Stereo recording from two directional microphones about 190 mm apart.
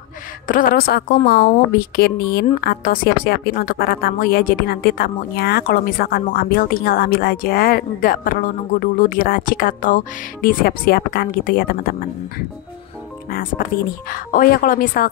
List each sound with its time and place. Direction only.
0.5 s speech: 45° left (ahead or behind)
13.3 s speech: 45° left (ahead or behind)